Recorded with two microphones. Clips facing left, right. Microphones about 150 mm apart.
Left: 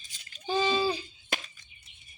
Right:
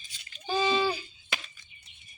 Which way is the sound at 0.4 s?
20° left (ahead or behind).